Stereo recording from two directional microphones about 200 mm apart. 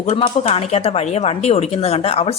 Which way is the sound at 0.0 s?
30° left (ahead or behind).